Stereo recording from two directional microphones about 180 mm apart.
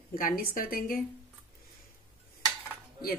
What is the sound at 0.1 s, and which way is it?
Speech, 55° left (ahead or behind).